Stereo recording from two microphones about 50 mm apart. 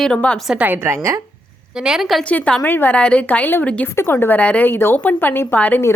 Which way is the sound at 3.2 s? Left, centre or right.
Left.